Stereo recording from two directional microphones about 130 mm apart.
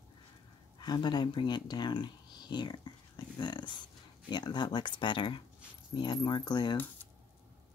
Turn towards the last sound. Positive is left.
turn(degrees=35)  # may be behind; listen again after turning